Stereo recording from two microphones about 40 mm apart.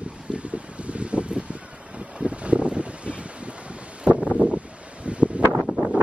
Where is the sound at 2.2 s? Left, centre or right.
Right.